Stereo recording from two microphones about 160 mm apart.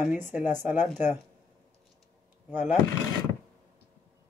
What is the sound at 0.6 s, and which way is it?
Speech, 10° right (ahead or behind).